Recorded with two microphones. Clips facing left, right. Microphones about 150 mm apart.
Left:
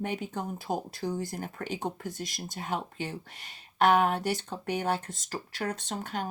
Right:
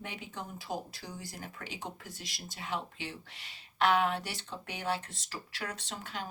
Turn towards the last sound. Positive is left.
turn(degrees=50)  # may be behind; listen again after turning